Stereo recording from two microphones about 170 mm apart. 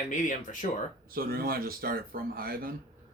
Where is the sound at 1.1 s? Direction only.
60° right (ahead or behind).